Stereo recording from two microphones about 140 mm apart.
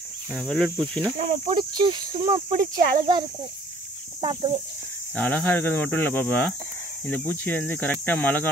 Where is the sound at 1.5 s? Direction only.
35° right (ahead or behind).